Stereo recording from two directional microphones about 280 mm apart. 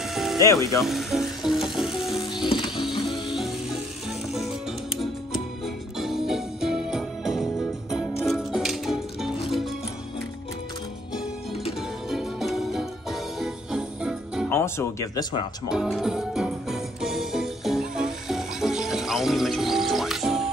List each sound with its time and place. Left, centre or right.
0.1 s ratchet: centre
0.7 s music: centre
2.3 s music: centre
3.0 s music: centre
5.9 s music: centre
12.1 s music: centre
14.5 s speech: centre
15.7 s music: centre